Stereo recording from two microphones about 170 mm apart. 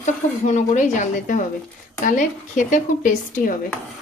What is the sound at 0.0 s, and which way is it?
A woman's voice, 45° left (ahead or behind).